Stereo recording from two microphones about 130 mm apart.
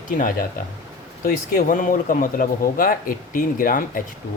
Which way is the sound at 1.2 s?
75° left (ahead or behind).